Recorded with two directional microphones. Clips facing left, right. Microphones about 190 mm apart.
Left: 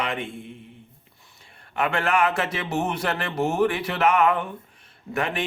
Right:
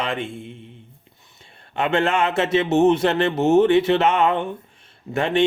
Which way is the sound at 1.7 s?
25° right (ahead or behind).